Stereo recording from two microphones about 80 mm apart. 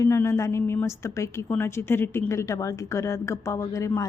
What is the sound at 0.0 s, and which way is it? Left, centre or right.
Speech, left.